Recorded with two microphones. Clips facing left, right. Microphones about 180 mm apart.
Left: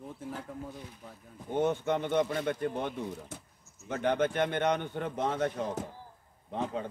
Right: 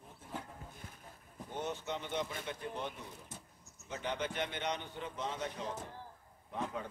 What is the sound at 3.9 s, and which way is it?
Speech, 60° left (ahead or behind).